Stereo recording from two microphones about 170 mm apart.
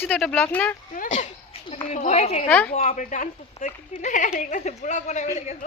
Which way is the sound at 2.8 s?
45° left (ahead or behind).